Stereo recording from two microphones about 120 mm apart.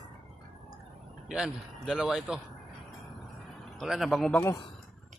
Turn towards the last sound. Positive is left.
turn(degrees=20)  # may be behind; listen again after turning